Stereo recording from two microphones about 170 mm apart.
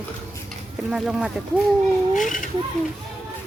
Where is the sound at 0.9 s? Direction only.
5° right (ahead or behind).